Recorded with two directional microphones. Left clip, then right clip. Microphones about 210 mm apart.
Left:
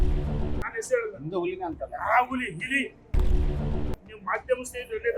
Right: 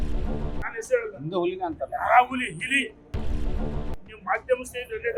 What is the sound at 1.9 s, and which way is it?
Speech, 5° left (ahead or behind).